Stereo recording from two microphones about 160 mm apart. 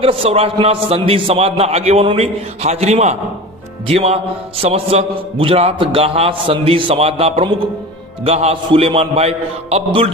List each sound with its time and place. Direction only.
0.0 s a man's voice: 35° right (ahead or behind)